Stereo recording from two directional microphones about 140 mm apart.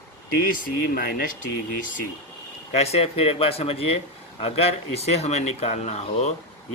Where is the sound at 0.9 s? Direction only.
90° left.